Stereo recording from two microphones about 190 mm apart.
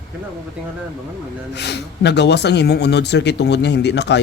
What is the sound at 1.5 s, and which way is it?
Speech, 65° left (ahead or behind).